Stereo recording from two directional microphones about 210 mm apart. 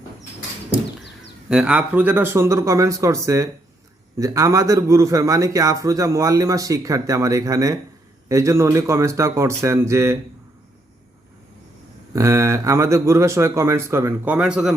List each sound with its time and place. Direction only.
1.5 s a man's voice: 5° right (ahead or behind)
12.1 s a man's voice: 15° right (ahead or behind)